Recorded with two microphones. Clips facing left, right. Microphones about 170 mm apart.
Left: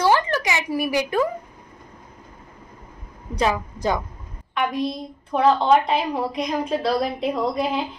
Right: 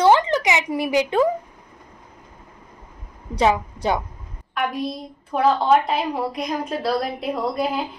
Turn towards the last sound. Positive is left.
turn(degrees=-5)  # may be behind; listen again after turning